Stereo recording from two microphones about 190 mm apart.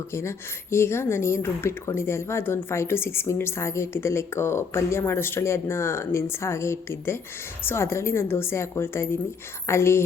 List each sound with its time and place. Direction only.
0.1 s speech: 15° left (ahead or behind)